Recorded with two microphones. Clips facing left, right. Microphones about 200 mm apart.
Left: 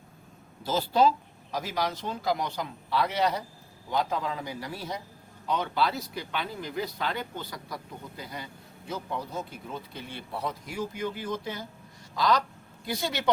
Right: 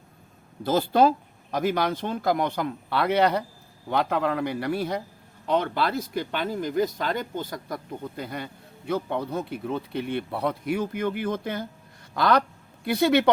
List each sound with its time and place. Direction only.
0.6 s a woman's voice: 55° right (ahead or behind)